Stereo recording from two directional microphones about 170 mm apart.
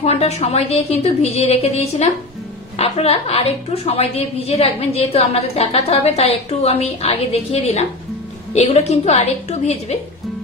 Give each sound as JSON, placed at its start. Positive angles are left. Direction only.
{"t": 0.0, "sound": "a woman's voice", "side_deg": 40}